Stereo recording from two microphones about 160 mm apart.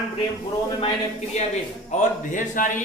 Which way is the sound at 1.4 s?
45° left (ahead or behind).